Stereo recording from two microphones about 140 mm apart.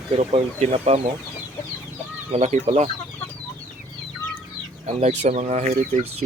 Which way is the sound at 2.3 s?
55° right (ahead or behind).